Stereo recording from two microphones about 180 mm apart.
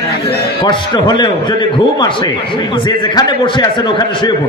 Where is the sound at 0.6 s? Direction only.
25° left (ahead or behind).